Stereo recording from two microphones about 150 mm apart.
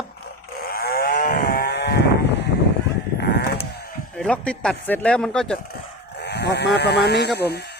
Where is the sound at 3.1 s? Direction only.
90° left.